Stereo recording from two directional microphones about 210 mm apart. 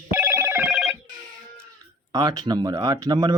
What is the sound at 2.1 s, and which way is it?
Speech, 20° right (ahead or behind).